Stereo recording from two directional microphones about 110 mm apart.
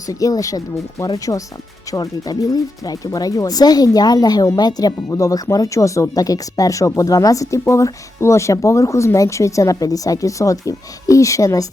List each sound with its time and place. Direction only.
0.1 s speech: 30° left (ahead or behind)